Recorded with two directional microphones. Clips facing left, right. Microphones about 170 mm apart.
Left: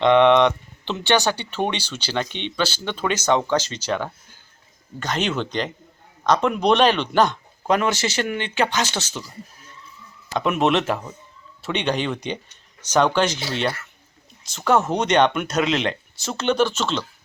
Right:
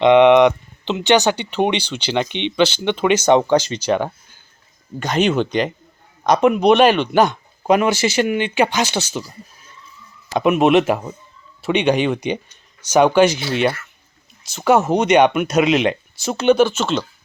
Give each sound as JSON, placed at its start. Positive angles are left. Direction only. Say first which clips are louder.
{"t": 0.0, "sound": "speech", "louder": "right 4 dB", "side_deg": -15}
{"t": 10.3, "sound": "speech", "louder": "right 6 dB", "side_deg": -10}